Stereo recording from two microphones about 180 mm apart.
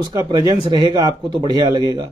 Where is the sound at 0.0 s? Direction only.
20° right (ahead or behind).